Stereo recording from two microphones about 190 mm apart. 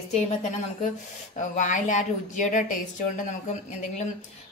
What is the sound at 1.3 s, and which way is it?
A woman's voice, 40° left (ahead or behind).